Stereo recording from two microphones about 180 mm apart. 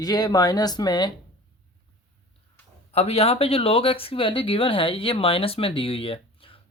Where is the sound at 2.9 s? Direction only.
35° left (ahead or behind).